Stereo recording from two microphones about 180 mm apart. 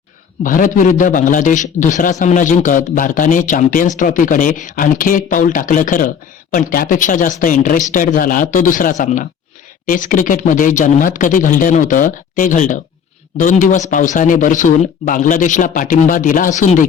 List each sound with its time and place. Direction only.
0.4 s a man's voice: 50° left (ahead or behind)